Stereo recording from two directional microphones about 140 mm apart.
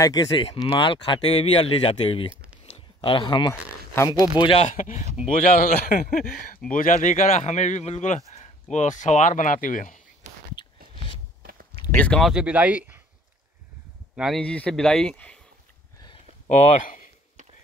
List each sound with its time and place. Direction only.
0.0 s speech: 25° left (ahead or behind); by 2.2 s 40° left (ahead or behind)
2.6 s a sound: 45° left (ahead or behind)
4.1 s speech: 30° left (ahead or behind)
4.6 s a man's voice: 65° left (ahead or behind)
6.7 s a man's voice: 70° left (ahead or behind)
10.6 s a sound: 35° left (ahead or behind)
11.9 s speech: 10° left (ahead or behind); by 13.0 s 10° right (ahead or behind)
14.1 s speech: 5° right (ahead or behind)
14.4 s speech: 10° left (ahead or behind)
16.4 s speech: 55° left (ahead or behind)